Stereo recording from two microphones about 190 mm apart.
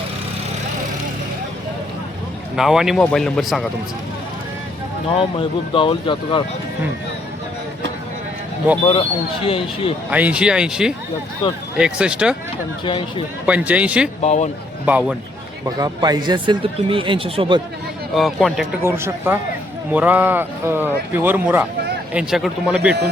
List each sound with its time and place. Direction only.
2.6 s a man's voice: centre (ahead or behind)
5.1 s speech: 30° left (ahead or behind)
8.8 s speech: 30° left (ahead or behind)
10.1 s a man's voice: 10° right (ahead or behind)
11.4 s speech: 25° left (ahead or behind)
11.8 s a man's voice: 5° right (ahead or behind)
12.8 s speech: 25° left (ahead or behind)
13.4 s speech: 5° right (ahead or behind)
14.2 s speech: 35° left (ahead or behind)
14.8 s speech: 5° right (ahead or behind)
15.6 s speech: 20° right (ahead or behind)
18.1 s a man's voice: centre (ahead or behind)
18.8 s a man's voice: 15° right (ahead or behind)